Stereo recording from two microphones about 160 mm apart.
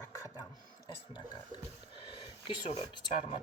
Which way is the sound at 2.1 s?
30° left (ahead or behind).